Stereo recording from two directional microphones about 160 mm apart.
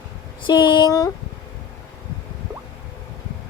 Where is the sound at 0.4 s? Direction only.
30° left (ahead or behind).